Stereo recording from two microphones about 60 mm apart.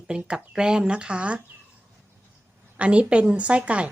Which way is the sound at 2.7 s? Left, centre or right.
Centre.